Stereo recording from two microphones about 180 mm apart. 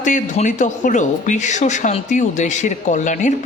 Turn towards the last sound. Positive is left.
turn(degrees=45)  # may be behind; listen again after turning